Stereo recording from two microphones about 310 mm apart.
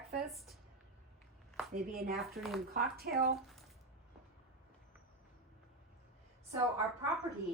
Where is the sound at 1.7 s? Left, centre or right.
Right.